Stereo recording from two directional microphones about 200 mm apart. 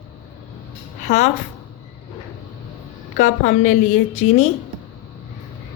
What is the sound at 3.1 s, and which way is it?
Speech, 40° left (ahead or behind).